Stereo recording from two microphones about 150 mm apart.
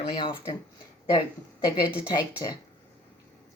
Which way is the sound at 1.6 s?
30° left (ahead or behind).